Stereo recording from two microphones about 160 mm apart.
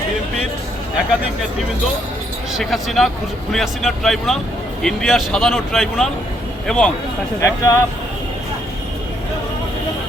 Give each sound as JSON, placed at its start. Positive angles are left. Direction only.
{"t": 2.5, "sound": "speech", "side_deg": 0}
{"t": 7.4, "sound": "speech", "side_deg": 20}